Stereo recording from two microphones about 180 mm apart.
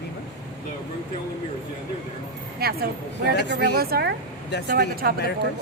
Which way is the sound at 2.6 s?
60° right (ahead or behind).